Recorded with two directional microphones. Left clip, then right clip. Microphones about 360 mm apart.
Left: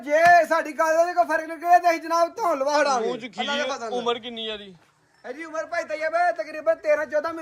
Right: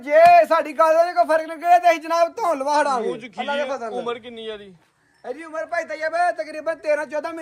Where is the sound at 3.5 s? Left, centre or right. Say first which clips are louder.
Right 3 dB; centre.